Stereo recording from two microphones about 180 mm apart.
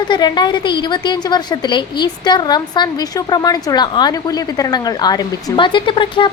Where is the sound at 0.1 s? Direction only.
25° left (ahead or behind).